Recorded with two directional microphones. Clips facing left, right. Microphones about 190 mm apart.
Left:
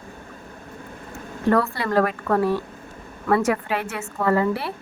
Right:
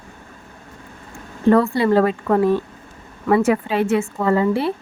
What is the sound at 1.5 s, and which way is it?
A woman's voice, 25° right (ahead or behind).